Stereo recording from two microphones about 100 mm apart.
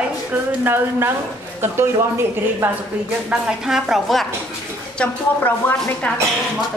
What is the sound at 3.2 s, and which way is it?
A woman's voice, 5° right (ahead or behind).